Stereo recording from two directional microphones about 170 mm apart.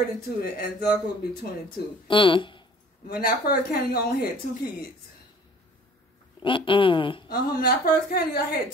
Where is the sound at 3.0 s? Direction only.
60° left (ahead or behind).